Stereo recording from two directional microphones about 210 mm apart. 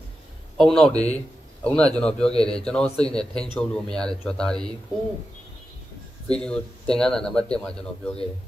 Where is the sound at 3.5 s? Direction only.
5° left (ahead or behind).